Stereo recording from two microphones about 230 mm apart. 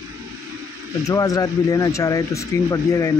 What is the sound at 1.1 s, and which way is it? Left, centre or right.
Speech, centre.